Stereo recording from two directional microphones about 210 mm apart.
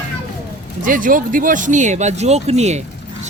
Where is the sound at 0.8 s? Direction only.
40° right (ahead or behind).